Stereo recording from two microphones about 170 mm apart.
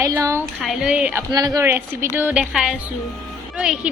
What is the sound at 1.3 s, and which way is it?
A woman's voice, 25° right (ahead or behind).